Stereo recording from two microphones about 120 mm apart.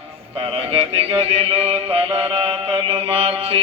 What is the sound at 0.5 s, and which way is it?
Music, 55° right (ahead or behind).